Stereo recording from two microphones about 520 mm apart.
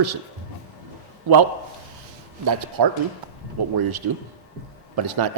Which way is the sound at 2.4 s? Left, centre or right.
Right.